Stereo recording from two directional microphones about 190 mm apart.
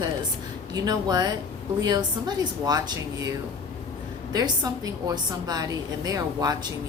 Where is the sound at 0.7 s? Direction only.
20° right (ahead or behind).